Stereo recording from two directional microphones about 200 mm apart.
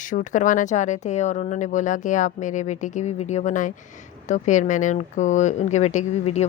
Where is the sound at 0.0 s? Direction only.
40° left (ahead or behind).